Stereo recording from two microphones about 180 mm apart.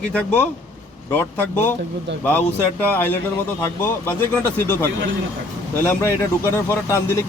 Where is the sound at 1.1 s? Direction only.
15° left (ahead or behind).